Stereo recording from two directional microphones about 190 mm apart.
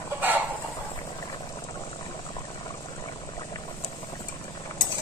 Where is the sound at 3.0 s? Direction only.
20° left (ahead or behind).